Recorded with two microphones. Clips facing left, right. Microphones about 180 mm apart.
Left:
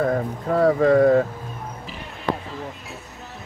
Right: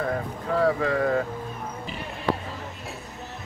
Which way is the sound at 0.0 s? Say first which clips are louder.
Left 6 dB; 45° left (ahead or behind).